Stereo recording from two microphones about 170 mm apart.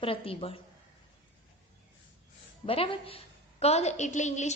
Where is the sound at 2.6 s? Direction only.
30° left (ahead or behind).